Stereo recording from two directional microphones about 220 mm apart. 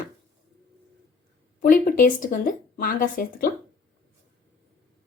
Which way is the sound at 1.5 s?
40° left (ahead or behind).